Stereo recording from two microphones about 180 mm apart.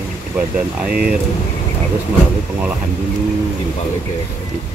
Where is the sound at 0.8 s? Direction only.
55° right (ahead or behind).